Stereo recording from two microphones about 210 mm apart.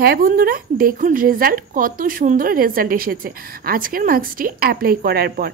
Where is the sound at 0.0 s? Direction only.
45° right (ahead or behind).